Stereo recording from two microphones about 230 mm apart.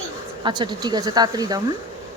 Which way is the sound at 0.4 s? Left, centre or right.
Centre.